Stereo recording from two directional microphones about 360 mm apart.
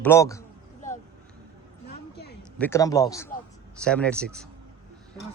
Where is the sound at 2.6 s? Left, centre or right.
Centre.